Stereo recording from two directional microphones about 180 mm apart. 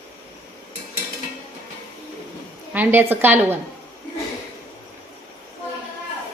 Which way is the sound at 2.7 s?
10° right (ahead or behind).